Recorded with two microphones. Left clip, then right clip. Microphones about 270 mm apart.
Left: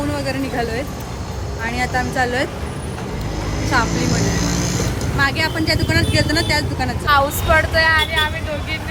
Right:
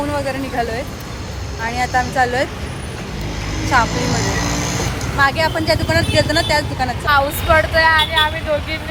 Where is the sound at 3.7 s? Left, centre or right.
Centre.